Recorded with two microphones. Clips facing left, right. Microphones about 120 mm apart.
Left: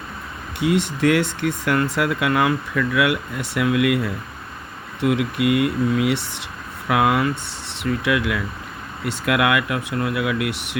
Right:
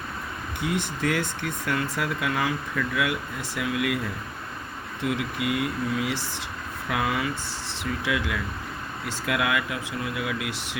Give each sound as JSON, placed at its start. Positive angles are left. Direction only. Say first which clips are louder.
{"t": 0.6, "sound": "speech", "louder": "left 9 dB", "side_deg": 70}
{"t": 5.0, "sound": "speech", "louder": "left 8 dB", "side_deg": 65}